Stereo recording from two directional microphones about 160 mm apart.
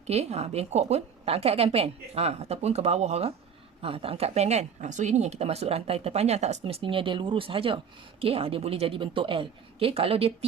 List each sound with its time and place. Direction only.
0.1 s a woman's voice: 40° right (ahead or behind)